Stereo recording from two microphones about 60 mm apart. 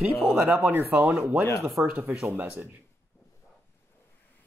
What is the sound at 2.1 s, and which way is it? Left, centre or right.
Speech, centre.